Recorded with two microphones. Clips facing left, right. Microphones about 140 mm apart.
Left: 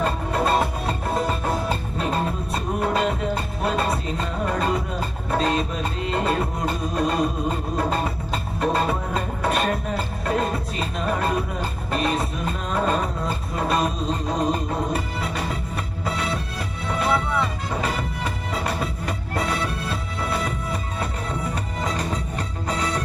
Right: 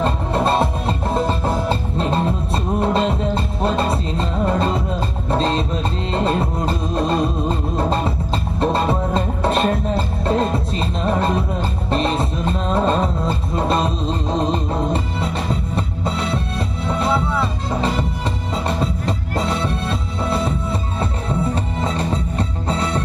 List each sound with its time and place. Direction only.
0.0 s music: 30° right (ahead or behind)